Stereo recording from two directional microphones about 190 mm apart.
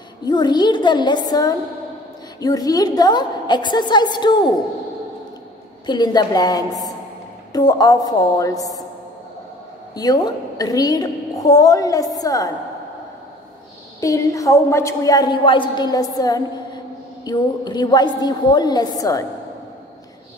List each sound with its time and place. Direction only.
0.2 s a woman's voice: 20° left (ahead or behind)
5.9 s a woman's voice: 20° left (ahead or behind)
9.9 s a woman's voice: 20° left (ahead or behind)
14.0 s a woman's voice: 15° left (ahead or behind)